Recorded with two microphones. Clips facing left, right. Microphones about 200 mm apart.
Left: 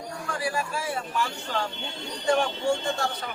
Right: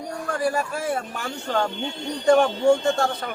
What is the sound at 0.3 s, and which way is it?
A man's voice, 45° right (ahead or behind).